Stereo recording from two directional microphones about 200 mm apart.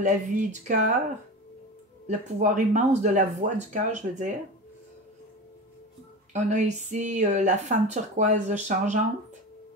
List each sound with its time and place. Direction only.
0.0 s speech: 40° right (ahead or behind)
2.0 s speech: 40° right (ahead or behind)
6.3 s speech: 35° right (ahead or behind)